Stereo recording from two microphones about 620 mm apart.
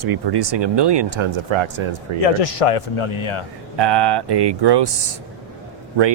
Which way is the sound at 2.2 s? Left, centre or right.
Left.